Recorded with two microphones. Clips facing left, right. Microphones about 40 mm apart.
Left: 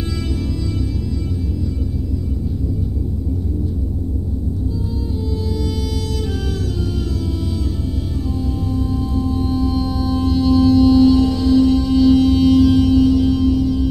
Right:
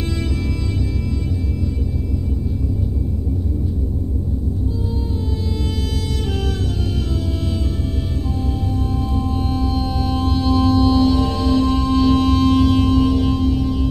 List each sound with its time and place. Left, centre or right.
8.7 s music: right